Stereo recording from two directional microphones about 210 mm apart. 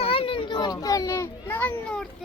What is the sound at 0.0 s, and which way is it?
Children playing, 25° left (ahead or behind).